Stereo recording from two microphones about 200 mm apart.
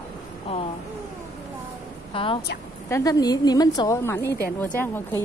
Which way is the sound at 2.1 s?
25° left (ahead or behind).